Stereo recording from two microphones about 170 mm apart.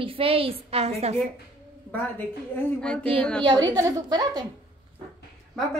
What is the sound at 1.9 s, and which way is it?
A woman's voice, 10° left (ahead or behind).